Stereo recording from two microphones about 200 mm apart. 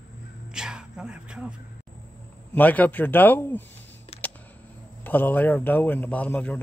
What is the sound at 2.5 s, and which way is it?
A man's voice, 10° left (ahead or behind).